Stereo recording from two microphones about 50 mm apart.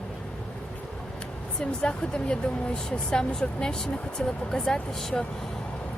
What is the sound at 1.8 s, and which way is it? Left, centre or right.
Speech, centre.